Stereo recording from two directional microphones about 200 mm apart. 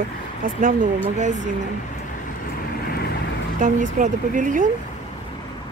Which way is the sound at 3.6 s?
40° right (ahead or behind).